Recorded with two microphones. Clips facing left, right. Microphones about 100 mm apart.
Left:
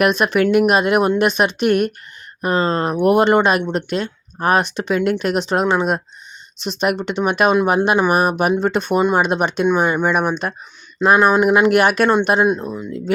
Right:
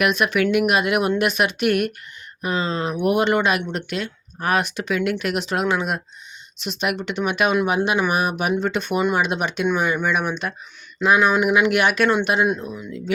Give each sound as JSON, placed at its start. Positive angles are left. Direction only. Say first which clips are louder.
{"t": 0.0, "sound": "speech", "louder": "left 4 dB", "side_deg": 35}
{"t": 2.4, "sound": "speech", "louder": "left 6 dB", "side_deg": 45}